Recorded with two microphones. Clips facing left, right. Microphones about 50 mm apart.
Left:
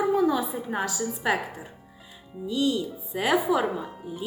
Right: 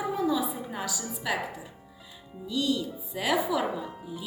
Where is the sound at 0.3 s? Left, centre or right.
Left.